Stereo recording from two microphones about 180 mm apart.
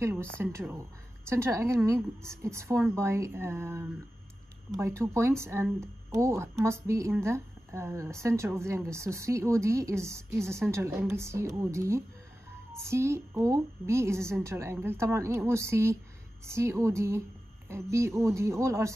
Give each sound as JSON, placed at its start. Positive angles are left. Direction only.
{"t": 0.0, "sound": "a woman's voice", "side_deg": -15}